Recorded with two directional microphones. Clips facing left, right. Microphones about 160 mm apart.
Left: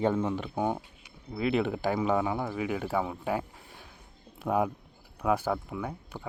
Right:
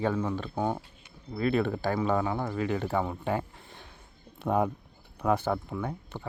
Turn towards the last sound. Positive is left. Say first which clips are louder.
# right 1 dB
turn(degrees=5)  # may be behind; listen again after turning